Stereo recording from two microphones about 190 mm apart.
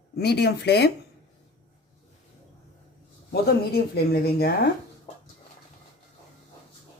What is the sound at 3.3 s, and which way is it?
Speech, 55° left (ahead or behind).